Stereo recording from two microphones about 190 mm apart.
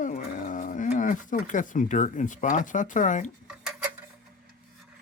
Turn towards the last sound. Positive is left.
turn(degrees=-5)  # may be behind; listen again after turning